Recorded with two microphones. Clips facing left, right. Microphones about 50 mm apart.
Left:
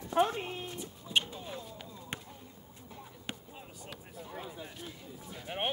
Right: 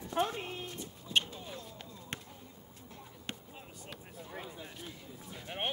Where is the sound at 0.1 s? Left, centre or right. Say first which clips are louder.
Left 4 dB; left.